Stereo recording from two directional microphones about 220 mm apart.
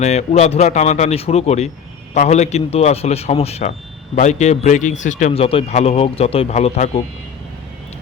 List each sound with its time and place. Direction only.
0.0 s a man's voice: 30° left (ahead or behind)